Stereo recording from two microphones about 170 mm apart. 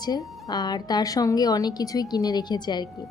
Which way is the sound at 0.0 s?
25° left (ahead or behind).